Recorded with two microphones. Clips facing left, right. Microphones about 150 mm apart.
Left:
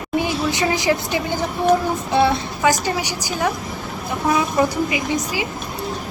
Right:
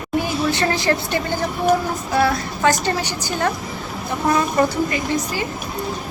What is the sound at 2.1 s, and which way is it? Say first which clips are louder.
Child singing: left 1 dB; 25° left (ahead or behind).